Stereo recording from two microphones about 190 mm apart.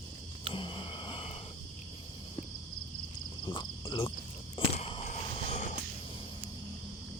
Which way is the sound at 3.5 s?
25° left (ahead or behind).